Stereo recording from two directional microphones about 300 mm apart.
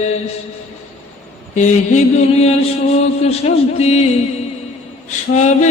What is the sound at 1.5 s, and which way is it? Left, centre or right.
Mantra, left.